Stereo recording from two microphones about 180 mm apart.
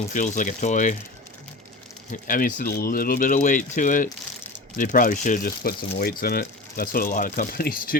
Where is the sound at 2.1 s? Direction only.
50° left (ahead or behind).